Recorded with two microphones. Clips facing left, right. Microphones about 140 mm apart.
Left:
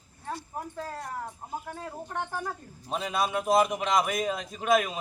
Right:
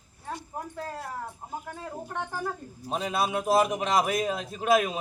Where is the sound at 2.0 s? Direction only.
10° right (ahead or behind).